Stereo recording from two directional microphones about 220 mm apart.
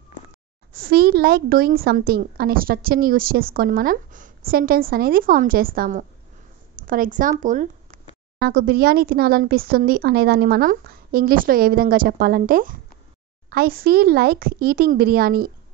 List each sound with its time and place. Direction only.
0.7 s speech: 45° right (ahead or behind)